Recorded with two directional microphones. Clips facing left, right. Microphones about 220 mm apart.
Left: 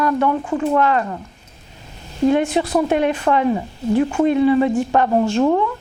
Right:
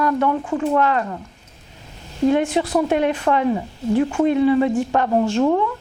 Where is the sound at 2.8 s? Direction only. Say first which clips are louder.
Left 1 dB; 20° left (ahead or behind).